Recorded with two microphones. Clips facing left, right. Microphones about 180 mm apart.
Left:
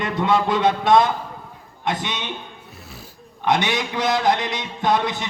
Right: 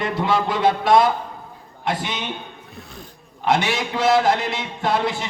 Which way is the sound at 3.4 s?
20° left (ahead or behind).